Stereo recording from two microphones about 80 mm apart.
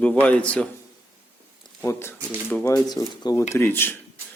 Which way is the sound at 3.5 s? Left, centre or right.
Left.